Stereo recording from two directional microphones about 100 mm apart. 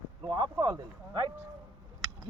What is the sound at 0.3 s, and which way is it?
Boat, 50° right (ahead or behind).